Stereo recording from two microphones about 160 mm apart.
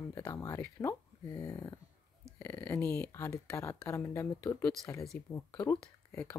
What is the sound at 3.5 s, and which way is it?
Speech, 20° left (ahead or behind).